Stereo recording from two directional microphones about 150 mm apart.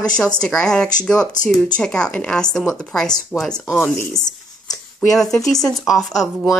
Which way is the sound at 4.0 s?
25° left (ahead or behind).